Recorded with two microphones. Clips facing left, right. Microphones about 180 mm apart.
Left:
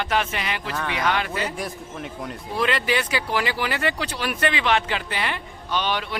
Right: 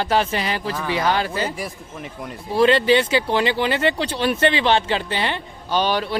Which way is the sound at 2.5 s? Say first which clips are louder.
Right 8 dB; 30° right (ahead or behind).